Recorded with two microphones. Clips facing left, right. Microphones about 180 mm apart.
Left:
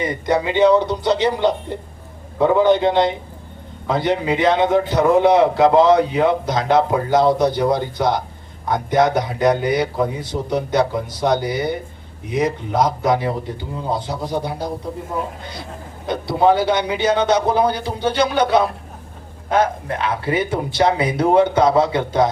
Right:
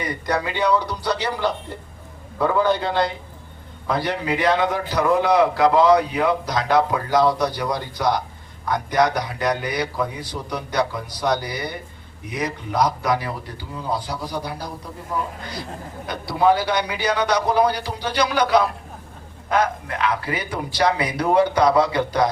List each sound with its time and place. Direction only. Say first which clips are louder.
0.0 s a man's voice: left 5 dB; 20° left (ahead or behind)
16.0 s a man's voice: left 3 dB; 25° left (ahead or behind)